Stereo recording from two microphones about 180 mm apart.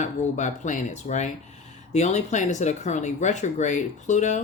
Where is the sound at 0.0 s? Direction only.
40° left (ahead or behind).